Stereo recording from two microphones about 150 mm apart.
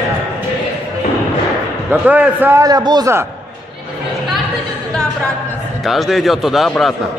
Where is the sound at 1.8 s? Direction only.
10° right (ahead or behind).